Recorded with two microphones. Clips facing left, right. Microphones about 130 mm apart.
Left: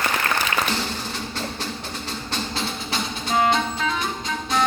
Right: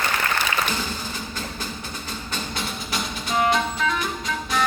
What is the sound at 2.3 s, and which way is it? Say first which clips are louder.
Music: left 2 dB; 30° left (ahead or behind).